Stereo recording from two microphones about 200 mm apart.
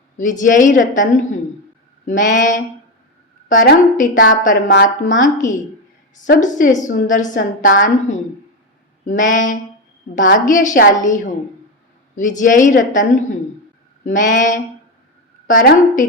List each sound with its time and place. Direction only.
0.2 s a woman's voice: 40° left (ahead or behind)